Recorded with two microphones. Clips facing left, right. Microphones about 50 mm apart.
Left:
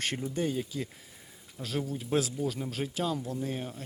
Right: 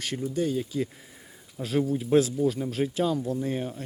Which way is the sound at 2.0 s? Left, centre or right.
Centre.